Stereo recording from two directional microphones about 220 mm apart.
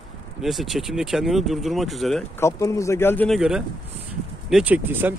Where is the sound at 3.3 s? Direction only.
5° right (ahead or behind).